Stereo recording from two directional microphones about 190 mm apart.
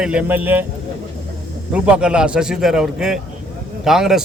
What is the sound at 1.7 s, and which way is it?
A man's voice, 5° right (ahead or behind).